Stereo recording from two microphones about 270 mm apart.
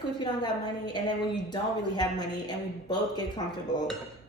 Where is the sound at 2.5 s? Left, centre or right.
Centre.